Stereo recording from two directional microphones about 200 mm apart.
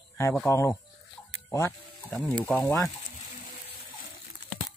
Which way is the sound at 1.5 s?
15° left (ahead or behind).